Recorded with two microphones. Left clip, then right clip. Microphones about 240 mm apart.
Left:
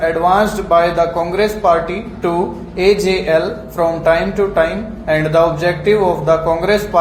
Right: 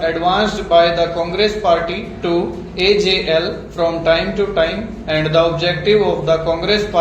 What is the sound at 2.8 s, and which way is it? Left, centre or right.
A man's voice, left.